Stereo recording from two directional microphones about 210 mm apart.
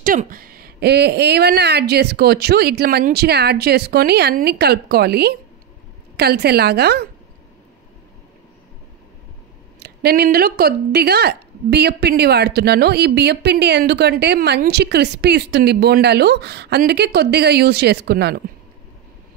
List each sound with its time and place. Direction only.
0.0 s speech: 40° right (ahead or behind)
9.8 s speech: 50° right (ahead or behind)